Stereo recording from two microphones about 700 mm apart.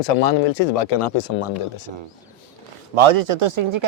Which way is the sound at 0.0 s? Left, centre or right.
Left.